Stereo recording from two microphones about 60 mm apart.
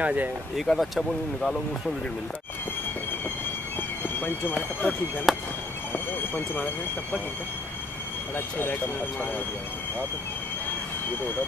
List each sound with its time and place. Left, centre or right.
0.0 s speech: right
0.6 s speech: centre
4.2 s speech: left
5.3 s speech: centre
6.3 s speech: left